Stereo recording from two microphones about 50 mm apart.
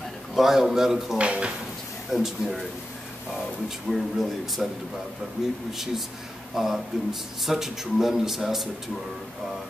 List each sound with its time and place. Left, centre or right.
0.3 s a man's voice: centre
1.1 s speech: right
2.0 s a man's voice: centre
3.9 s a man's voice: centre
5.7 s a man's voice: centre